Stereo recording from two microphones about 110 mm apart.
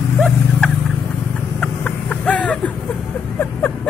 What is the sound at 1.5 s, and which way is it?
Chicken, 10° left (ahead or behind).